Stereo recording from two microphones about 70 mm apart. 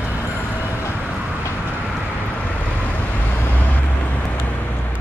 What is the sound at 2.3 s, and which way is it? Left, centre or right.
Vehicle, left.